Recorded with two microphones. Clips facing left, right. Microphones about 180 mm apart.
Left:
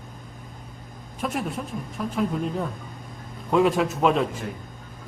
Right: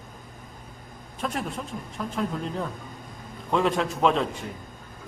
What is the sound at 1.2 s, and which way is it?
A man's voice, 5° left (ahead or behind).